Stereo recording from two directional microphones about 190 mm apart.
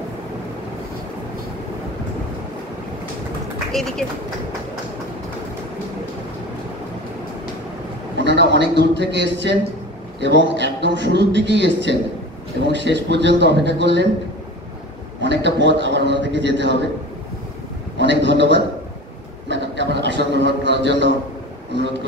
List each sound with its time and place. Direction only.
3.8 s speech: centre (ahead or behind)
8.2 s a sound: 65° right (ahead or behind)
8.5 s a man's voice: 65° right (ahead or behind)
15.2 s a man's voice: 65° right (ahead or behind)
17.9 s a man's voice: 70° right (ahead or behind)
19.5 s a sound: 65° right (ahead or behind)